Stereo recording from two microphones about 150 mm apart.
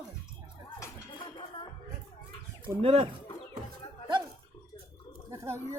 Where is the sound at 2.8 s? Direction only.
40° right (ahead or behind).